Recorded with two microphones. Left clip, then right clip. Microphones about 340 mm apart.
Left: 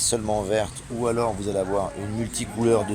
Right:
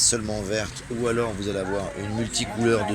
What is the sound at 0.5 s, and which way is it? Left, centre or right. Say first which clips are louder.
Speech: left 3 dB; centre.